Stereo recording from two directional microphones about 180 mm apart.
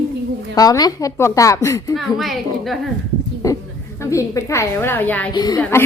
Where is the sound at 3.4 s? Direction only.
20° left (ahead or behind).